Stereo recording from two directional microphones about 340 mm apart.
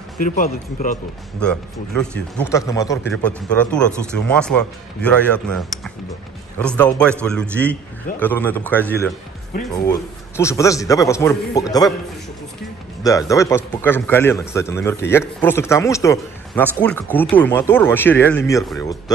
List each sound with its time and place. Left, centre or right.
0.2 s speech: left
1.4 s speech: centre
6.6 s speech: centre
13.3 s speech: centre